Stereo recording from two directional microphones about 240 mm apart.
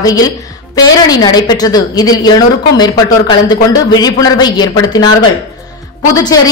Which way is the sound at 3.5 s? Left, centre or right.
Centre.